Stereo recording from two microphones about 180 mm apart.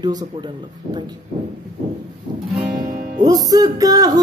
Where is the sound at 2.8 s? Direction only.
50° right (ahead or behind).